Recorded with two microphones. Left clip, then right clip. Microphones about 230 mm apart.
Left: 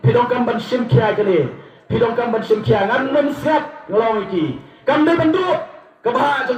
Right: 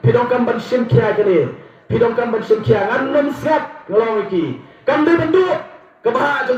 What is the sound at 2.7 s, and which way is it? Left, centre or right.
A man's voice, right.